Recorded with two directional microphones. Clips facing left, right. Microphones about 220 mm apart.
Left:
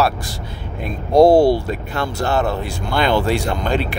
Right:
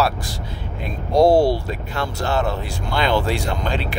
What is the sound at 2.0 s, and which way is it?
Speech, 55° left (ahead or behind).